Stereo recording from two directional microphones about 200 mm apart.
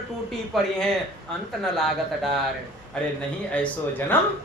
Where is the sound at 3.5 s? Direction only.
5° left (ahead or behind).